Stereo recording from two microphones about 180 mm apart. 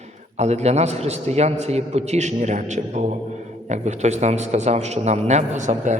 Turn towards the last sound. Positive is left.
turn(degrees=-45)  # may be behind; listen again after turning